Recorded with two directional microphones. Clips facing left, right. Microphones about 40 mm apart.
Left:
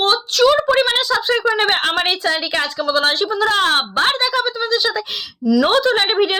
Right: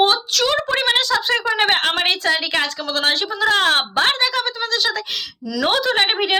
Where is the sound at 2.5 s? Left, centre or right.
Right.